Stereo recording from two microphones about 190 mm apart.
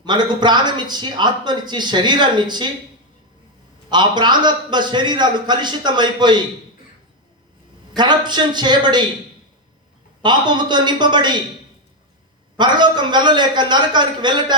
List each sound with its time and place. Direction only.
0.0 s speech: 25° right (ahead or behind)
3.8 s speech: 25° right (ahead or behind)
7.9 s speech: 25° right (ahead or behind)
10.2 s speech: 25° right (ahead or behind)
12.5 s speech: 25° right (ahead or behind)